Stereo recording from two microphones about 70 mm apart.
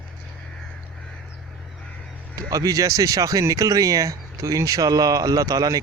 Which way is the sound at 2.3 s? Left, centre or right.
Right.